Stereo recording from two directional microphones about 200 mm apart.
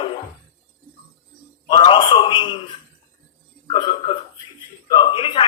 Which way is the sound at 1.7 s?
25° left (ahead or behind).